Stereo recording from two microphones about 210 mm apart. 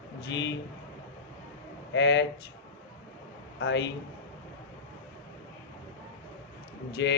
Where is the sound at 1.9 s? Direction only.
60° left (ahead or behind).